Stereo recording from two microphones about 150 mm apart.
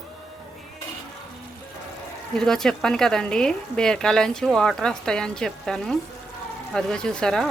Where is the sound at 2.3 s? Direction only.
5° left (ahead or behind).